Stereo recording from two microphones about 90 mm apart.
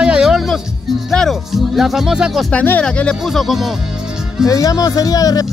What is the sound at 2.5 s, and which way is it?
Speech, 15° left (ahead or behind).